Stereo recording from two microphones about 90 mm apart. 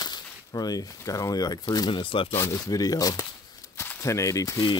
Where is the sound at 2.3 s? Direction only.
30° left (ahead or behind).